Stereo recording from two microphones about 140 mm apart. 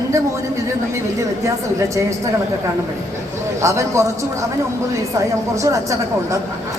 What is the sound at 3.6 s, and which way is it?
Speech, 20° right (ahead or behind).